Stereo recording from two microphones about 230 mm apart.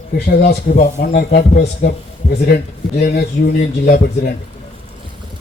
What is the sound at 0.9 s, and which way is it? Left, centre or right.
A man's voice, left.